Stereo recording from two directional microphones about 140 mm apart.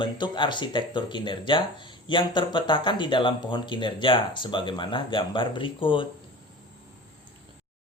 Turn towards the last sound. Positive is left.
turn(degrees=35)  # may be behind; listen again after turning